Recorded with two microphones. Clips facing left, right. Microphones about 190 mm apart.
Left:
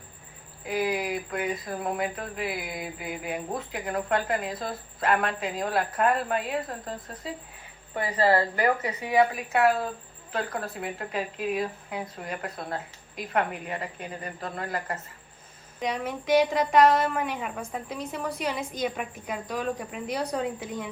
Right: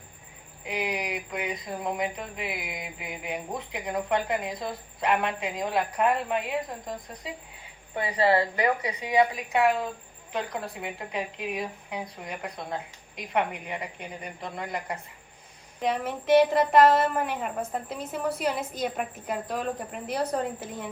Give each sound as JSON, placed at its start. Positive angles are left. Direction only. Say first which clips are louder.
{"t": 0.6, "sound": "speech", "louder": "left 3 dB", "side_deg": -15}
{"t": 15.8, "sound": "a woman's voice", "louder": "right 2 dB", "side_deg": -5}